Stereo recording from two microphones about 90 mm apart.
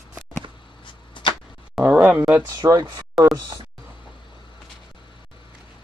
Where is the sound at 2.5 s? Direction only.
50° right (ahead or behind).